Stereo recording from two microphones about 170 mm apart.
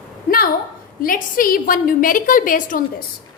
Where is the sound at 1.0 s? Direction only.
55° left (ahead or behind).